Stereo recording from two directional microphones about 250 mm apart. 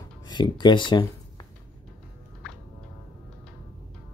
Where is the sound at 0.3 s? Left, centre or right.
Centre.